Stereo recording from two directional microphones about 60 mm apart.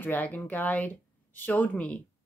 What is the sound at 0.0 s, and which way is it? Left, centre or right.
Speech, left.